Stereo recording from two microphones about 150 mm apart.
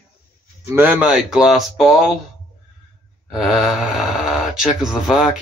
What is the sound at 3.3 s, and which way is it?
Speech, centre (ahead or behind).